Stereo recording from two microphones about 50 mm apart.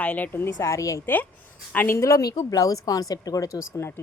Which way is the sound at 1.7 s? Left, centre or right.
Left.